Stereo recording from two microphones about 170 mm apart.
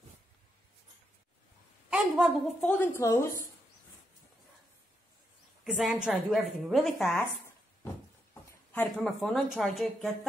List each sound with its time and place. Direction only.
1.9 s a sound: 5° right (ahead or behind)
2.6 s a woman's voice: 5° left (ahead or behind)
3.0 s a woman's voice: 15° left (ahead or behind)
5.6 s a woman's voice: centre (ahead or behind)
9.0 s a woman's voice: centre (ahead or behind)